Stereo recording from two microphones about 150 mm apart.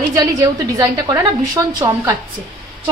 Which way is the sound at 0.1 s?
25° right (ahead or behind).